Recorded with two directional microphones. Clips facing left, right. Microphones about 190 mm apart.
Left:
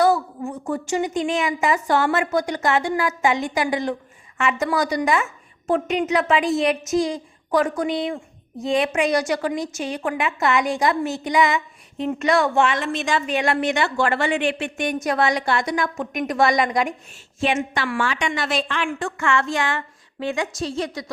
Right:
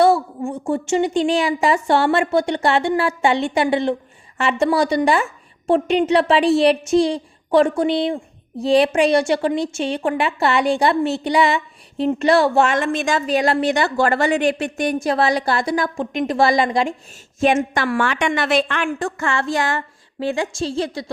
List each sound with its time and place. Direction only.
0.0 s a woman's voice: 30° right (ahead or behind)
17.4 s a woman's voice: 45° right (ahead or behind)
18.9 s a woman's voice: 40° right (ahead or behind)